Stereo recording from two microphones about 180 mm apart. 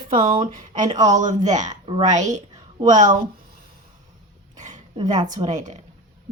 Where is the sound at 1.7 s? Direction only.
25° right (ahead or behind).